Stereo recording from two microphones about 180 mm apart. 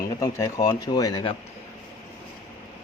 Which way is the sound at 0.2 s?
15° left (ahead or behind).